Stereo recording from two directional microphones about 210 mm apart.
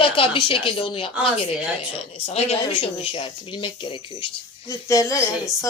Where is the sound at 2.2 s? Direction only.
30° left (ahead or behind).